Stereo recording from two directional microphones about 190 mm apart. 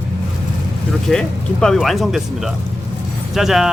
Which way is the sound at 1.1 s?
5° left (ahead or behind).